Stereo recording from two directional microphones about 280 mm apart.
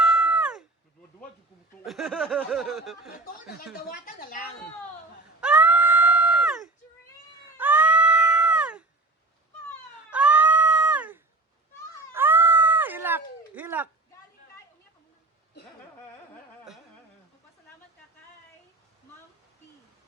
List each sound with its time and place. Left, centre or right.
0.0 s a sound: centre
1.8 s speech: centre
3.4 s speech: left
5.4 s cat: centre
10.1 s cat: centre
12.1 s a sound: centre